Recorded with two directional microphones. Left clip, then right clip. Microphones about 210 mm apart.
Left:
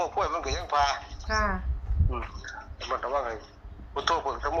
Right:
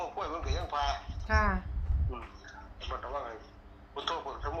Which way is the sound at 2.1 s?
45° left (ahead or behind).